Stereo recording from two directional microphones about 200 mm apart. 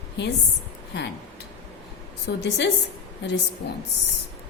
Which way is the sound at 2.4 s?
60° left (ahead or behind).